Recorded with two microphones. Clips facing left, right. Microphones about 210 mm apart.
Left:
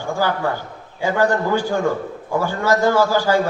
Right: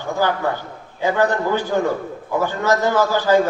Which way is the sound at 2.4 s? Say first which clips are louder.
Left 1 dB; 10° left (ahead or behind).